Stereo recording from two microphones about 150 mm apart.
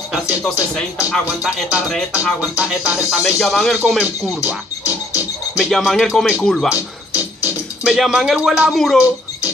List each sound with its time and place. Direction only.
0.1 s speech: centre (ahead or behind)
1.1 s music: centre (ahead or behind)
5.1 s speech: centre (ahead or behind)
7.8 s music: centre (ahead or behind)